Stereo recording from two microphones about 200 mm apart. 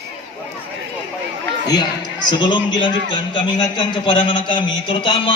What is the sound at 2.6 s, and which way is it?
Speech, 20° left (ahead or behind).